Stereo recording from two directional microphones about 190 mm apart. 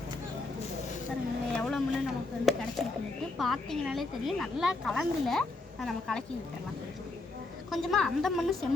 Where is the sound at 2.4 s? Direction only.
Centre (ahead or behind).